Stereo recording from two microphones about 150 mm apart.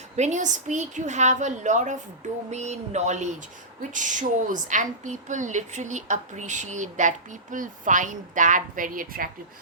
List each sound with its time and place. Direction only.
0.2 s a woman's voice: 50° right (ahead or behind)